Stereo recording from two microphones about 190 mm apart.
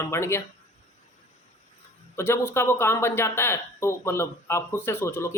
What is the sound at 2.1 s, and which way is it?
Speech, 15° left (ahead or behind).